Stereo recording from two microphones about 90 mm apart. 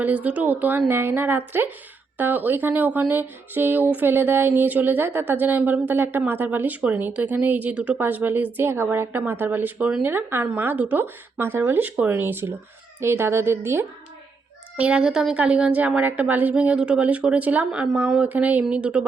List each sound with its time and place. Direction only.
0.0 s speech: 20° right (ahead or behind)
14.8 s a woman's voice: 10° right (ahead or behind)